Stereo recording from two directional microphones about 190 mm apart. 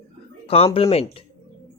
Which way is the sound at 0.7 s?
30° left (ahead or behind).